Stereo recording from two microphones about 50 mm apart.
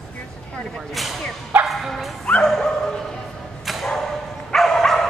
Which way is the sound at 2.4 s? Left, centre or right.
Centre.